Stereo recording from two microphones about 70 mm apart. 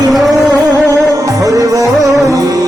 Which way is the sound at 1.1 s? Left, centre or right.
Right.